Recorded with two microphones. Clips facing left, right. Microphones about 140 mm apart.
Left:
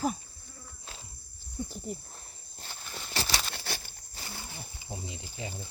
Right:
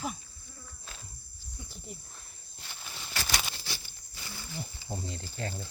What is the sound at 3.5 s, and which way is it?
Patter, 55° left (ahead or behind).